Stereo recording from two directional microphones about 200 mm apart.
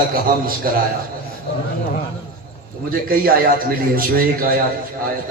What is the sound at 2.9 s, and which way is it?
A man's voice, 45° right (ahead or behind).